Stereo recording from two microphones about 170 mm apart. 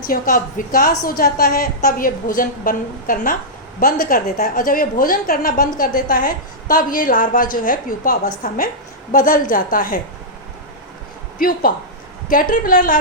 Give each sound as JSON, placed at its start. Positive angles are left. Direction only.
{"t": 0.0, "sound": "a woman's voice", "side_deg": 55}
{"t": 11.3, "sound": "a woman's voice", "side_deg": 55}